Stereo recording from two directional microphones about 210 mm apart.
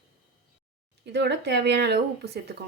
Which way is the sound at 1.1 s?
55° right (ahead or behind).